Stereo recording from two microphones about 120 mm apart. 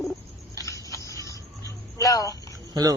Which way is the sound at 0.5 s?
30° left (ahead or behind).